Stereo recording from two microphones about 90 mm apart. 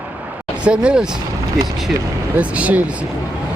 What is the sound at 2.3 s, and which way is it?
Speech, 15° right (ahead or behind).